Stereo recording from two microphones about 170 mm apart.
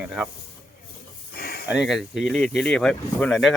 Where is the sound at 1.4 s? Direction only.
65° left (ahead or behind).